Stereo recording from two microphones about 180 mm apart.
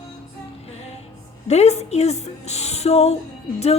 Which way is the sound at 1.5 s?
35° left (ahead or behind).